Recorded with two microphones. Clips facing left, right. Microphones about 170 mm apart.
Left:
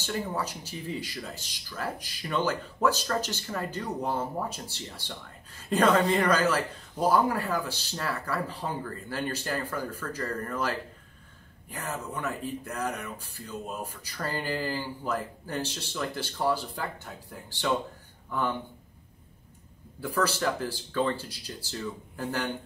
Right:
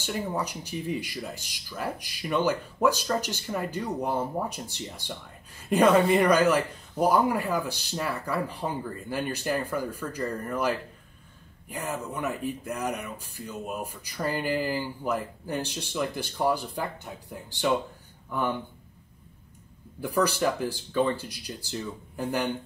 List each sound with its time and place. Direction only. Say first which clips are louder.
0.0 s speech: right 1 dB; 15° right (ahead or behind)
20.0 s speech: right 3 dB; 15° right (ahead or behind)